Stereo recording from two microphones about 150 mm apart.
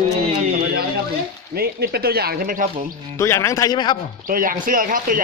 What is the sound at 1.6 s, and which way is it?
Speech, 90° right.